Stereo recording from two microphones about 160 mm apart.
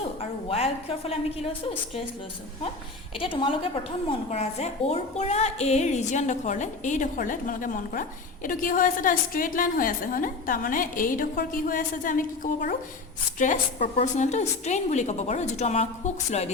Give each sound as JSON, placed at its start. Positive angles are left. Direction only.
{"t": 0.2, "sound": "a woman's voice", "side_deg": 40}
{"t": 3.2, "sound": "a woman's voice", "side_deg": 35}